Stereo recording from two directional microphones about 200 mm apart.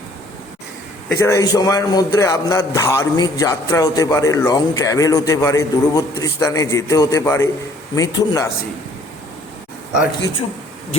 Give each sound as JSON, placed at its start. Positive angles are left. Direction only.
{"t": 1.0, "sound": "a man's voice", "side_deg": 15}